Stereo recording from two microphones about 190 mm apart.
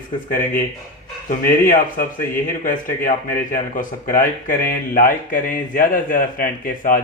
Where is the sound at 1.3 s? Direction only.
45° left (ahead or behind).